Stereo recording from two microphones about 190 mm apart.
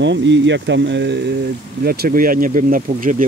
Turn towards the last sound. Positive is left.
turn(degrees=-45)  # may be behind; listen again after turning